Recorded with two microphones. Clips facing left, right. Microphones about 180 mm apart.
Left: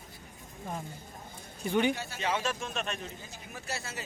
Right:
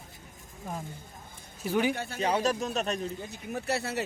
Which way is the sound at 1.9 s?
55° right (ahead or behind).